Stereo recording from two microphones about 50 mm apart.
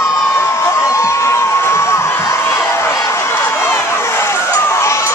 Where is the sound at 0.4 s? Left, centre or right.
Left.